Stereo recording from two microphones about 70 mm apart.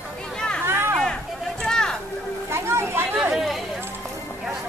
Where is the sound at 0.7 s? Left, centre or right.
Right.